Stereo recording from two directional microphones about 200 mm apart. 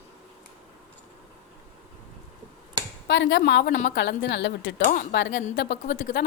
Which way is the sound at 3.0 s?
60° left (ahead or behind).